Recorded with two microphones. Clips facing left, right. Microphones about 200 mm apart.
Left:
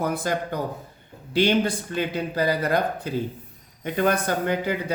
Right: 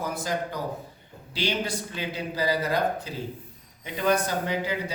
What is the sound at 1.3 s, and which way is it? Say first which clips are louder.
Speech: left 8 dB; 55° left (ahead or behind).